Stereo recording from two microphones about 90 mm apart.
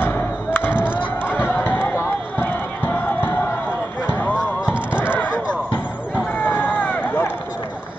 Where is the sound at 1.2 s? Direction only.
20° left (ahead or behind).